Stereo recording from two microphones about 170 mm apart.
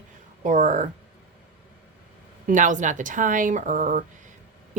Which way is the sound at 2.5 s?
50° right (ahead or behind).